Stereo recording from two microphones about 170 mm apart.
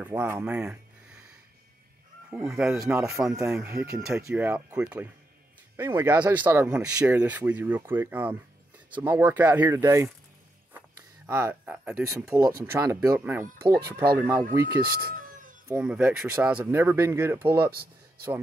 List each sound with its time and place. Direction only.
0.0 s speech: 10° right (ahead or behind)
2.3 s speech: 5° right (ahead or behind)
3.0 s speech: 15° right (ahead or behind)
14.8 s a sound: 55° right (ahead or behind)
15.7 s speech: 10° right (ahead or behind)
17.6 s a sound: 65° right (ahead or behind)